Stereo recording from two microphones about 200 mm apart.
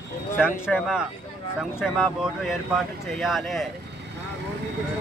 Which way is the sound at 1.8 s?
Centre (ahead or behind).